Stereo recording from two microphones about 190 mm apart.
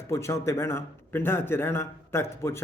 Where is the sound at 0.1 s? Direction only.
15° left (ahead or behind).